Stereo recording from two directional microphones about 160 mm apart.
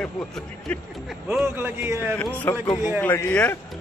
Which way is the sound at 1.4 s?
15° right (ahead or behind).